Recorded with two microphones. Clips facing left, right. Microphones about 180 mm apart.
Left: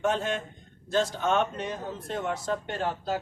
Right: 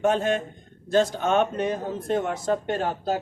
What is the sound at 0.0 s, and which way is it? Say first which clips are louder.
Speech: right 5 dB; 50° right (ahead or behind).